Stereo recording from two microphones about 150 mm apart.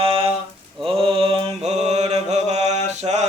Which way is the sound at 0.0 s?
35° right (ahead or behind).